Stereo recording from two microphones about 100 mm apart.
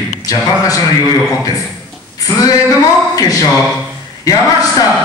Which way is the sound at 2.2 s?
40° left (ahead or behind).